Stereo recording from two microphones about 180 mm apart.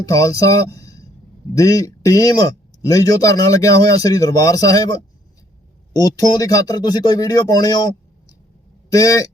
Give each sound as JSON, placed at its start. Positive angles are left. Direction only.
{"t": 0.0, "sound": "speech", "side_deg": 20}
{"t": 6.0, "sound": "speech", "side_deg": 20}